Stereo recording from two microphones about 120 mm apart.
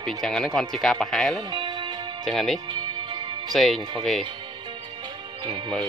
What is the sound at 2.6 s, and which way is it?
Music, 40° right (ahead or behind).